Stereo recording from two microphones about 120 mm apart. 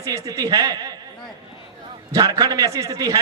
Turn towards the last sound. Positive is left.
turn(degrees=-30)  # may be behind; listen again after turning